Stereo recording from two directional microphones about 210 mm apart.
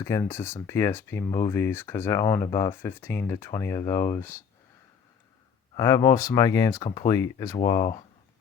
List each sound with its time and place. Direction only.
0.0 s speech: 15° left (ahead or behind)
5.7 s speech: 15° left (ahead or behind)